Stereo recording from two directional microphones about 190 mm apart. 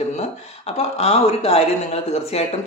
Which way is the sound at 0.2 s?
35° left (ahead or behind).